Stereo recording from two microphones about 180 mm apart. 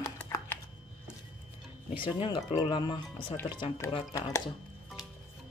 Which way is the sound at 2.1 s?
30° left (ahead or behind).